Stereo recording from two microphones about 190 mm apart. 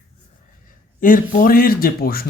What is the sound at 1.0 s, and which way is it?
Speech, 45° left (ahead or behind).